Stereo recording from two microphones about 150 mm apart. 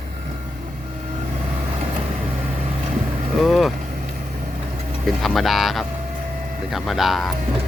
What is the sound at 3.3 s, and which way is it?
Speech, centre (ahead or behind).